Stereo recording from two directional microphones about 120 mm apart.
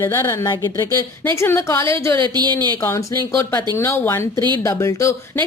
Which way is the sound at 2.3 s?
35° right (ahead or behind).